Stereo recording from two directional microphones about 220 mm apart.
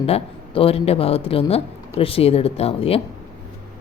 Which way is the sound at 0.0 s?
25° left (ahead or behind).